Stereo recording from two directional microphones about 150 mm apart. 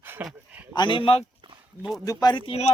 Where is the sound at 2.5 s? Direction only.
45° left (ahead or behind).